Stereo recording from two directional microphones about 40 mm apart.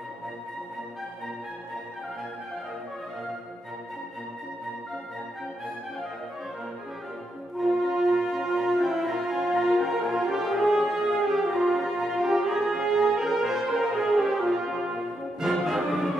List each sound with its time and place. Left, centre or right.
7.5 s music: centre
9.8 s french horn: centre
15.6 s music: centre